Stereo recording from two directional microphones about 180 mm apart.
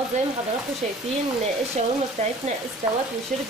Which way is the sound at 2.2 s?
40° right (ahead or behind).